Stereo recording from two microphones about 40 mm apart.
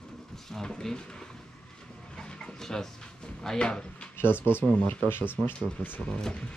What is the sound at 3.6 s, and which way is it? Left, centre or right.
Speech, left.